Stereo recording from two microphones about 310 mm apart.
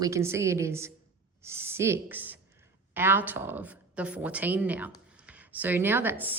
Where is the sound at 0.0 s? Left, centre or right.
Centre.